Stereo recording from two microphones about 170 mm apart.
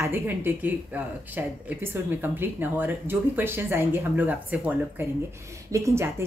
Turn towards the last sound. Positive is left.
turn(degrees=-15)  # may be behind; listen again after turning